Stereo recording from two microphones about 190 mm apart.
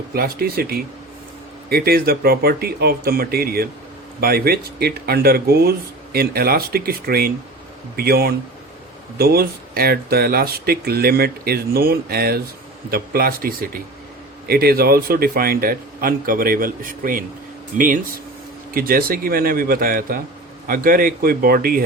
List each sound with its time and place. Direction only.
0.1 s speech: 50° right (ahead or behind)